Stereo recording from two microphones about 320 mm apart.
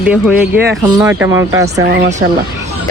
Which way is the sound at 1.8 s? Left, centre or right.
Right.